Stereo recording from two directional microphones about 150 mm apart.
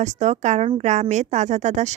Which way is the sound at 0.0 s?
50° right (ahead or behind).